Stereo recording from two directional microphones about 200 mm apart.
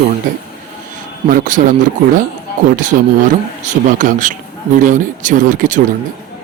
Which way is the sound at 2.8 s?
40° right (ahead or behind).